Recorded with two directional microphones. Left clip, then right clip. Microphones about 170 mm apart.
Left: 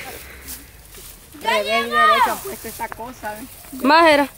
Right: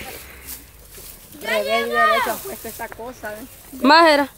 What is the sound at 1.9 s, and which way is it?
Speech, 50° left (ahead or behind).